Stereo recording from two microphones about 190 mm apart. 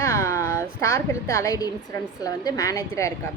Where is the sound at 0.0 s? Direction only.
15° left (ahead or behind).